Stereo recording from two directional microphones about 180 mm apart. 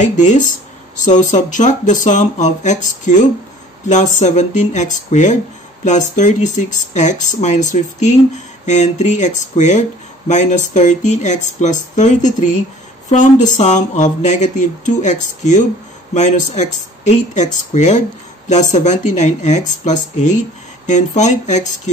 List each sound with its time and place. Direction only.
0.0 s speech: 40° left (ahead or behind)